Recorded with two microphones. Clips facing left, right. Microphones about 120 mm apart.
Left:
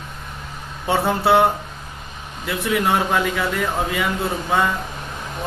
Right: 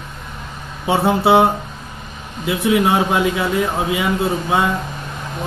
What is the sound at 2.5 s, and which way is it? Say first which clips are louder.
Speech: right 4 dB; 20° right (ahead or behind).